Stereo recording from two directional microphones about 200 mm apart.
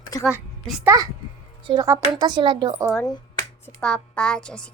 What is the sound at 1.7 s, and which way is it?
A woman's voice, 15° right (ahead or behind).